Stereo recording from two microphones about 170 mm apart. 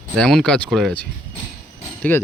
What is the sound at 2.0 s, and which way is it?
Speech, 10° left (ahead or behind).